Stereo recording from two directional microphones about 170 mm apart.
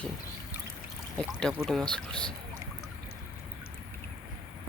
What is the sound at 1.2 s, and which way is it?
Speech, 5° left (ahead or behind).